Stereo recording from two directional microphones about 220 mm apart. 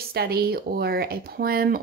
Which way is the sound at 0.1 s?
45° right (ahead or behind).